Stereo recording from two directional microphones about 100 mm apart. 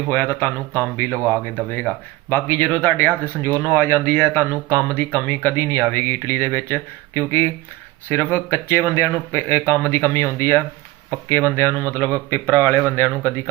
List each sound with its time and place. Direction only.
0.1 s speech: 20° left (ahead or behind)
2.3 s speech: 20° left (ahead or behind)